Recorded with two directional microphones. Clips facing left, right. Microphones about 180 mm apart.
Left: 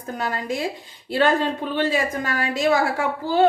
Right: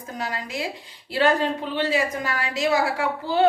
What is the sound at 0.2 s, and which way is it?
Speech, 50° left (ahead or behind).